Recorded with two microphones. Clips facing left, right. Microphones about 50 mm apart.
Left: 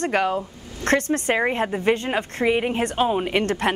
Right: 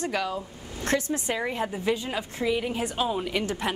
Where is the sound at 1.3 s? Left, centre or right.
Left.